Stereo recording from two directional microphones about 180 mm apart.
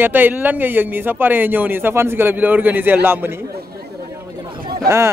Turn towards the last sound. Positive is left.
turn(degrees=-15)  # may be behind; listen again after turning